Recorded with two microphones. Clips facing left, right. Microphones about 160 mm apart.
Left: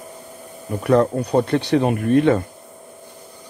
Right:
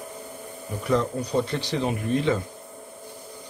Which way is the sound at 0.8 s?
60° left (ahead or behind).